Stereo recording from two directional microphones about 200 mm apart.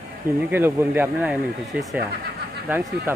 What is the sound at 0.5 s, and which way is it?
Speech, 10° right (ahead or behind).